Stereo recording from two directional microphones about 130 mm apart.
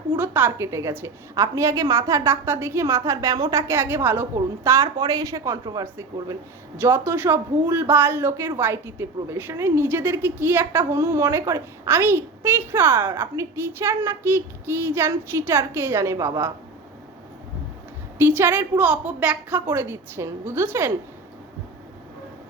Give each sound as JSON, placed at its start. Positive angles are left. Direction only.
{"t": 0.2, "sound": "speech", "side_deg": -15}
{"t": 18.2, "sound": "a woman's voice", "side_deg": -15}